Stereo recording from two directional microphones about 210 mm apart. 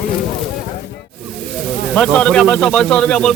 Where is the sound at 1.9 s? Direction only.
5° left (ahead or behind).